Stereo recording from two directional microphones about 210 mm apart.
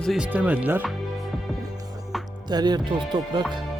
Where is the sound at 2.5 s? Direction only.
20° right (ahead or behind).